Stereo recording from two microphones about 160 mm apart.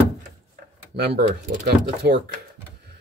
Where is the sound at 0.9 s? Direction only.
85° right.